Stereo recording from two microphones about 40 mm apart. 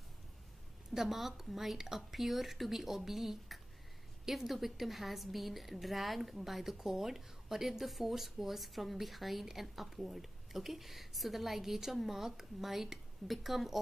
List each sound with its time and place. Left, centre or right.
0.9 s a woman's voice: centre